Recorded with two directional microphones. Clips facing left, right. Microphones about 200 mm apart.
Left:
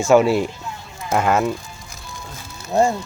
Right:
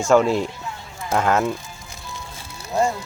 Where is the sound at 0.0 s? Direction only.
5° left (ahead or behind).